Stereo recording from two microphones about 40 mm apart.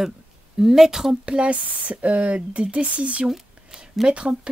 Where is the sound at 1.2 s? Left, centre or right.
Right.